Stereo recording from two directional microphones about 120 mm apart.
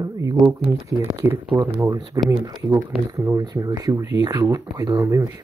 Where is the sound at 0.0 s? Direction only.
30° right (ahead or behind).